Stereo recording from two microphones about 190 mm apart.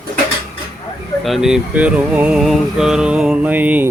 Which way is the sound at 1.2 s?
Centre (ahead or behind).